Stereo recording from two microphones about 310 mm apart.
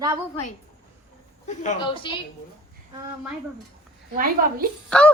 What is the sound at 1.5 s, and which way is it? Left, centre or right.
Speech, centre.